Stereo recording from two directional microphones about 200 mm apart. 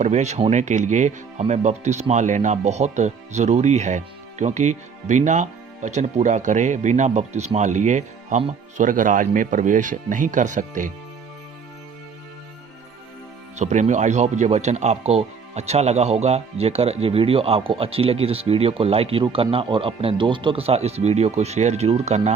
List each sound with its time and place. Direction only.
0.0 s speech: 35° right (ahead or behind)
13.6 s speech: 35° right (ahead or behind)